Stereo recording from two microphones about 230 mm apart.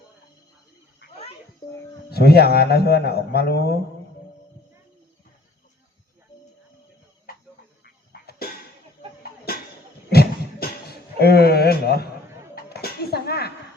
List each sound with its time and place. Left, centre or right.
2.0 s a man's voice: left
7.9 s dog: left
10.1 s a sound: left